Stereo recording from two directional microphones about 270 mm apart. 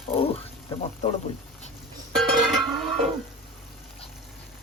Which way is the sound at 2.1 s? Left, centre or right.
Centre.